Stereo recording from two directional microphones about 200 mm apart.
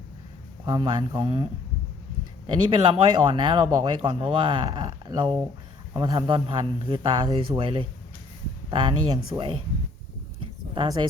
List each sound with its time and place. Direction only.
0.6 s speech: 25° right (ahead or behind)
2.5 s speech: 25° right (ahead or behind)